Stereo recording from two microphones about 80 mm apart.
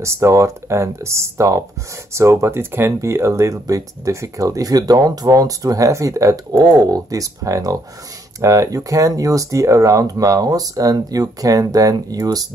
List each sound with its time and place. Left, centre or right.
0.0 s speech: right
6.5 s speech: right